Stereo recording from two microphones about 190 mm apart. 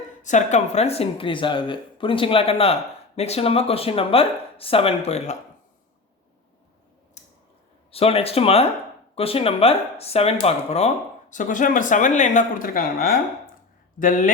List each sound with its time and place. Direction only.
0.2 s speech: 40° left (ahead or behind)
7.2 s a sound: 35° left (ahead or behind)
7.9 s speech: 30° left (ahead or behind)